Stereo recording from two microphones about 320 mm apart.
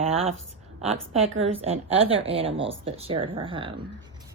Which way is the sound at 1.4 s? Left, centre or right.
Centre.